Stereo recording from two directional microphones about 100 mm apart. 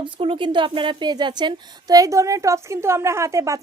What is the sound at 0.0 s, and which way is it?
Speech, 60° right (ahead or behind).